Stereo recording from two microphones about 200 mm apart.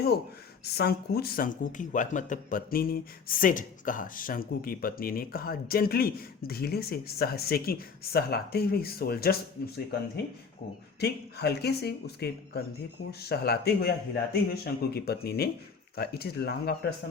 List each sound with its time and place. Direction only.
0.6 s speech: 50° left (ahead or behind)
11.0 s speech: 55° left (ahead or behind)